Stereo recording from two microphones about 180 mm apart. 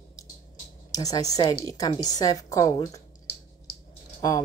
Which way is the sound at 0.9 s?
20° left (ahead or behind).